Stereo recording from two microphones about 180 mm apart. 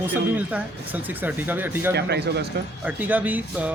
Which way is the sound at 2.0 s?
65° right (ahead or behind).